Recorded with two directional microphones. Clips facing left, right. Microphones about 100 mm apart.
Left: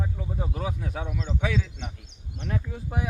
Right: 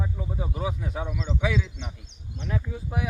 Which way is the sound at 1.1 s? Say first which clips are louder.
Right 1 dB; 45° left (ahead or behind).